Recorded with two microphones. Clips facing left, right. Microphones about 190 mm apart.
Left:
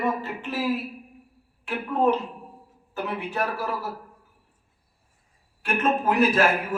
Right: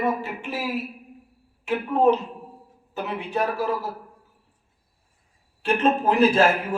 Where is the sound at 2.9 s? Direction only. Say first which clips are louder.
Right 2 dB; 20° right (ahead or behind).